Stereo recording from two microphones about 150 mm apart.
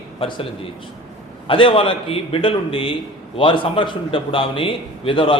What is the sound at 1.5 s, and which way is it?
A man's voice, 35° left (ahead or behind).